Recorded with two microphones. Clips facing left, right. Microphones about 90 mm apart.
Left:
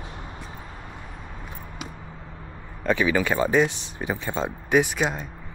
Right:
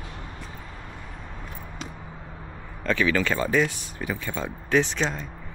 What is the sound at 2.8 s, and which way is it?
Speech, 15° left (ahead or behind).